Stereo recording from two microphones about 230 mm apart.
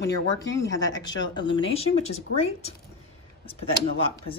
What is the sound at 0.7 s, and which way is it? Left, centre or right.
A woman's voice, centre.